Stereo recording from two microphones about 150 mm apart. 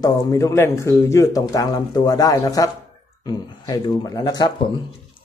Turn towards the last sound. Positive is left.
turn(degrees=25)  # may be behind; listen again after turning